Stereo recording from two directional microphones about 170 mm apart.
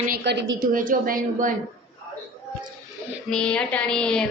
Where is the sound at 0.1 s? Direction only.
85° right.